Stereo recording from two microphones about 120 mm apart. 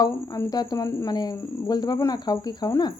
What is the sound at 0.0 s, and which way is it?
A woman's voice, 30° left (ahead or behind).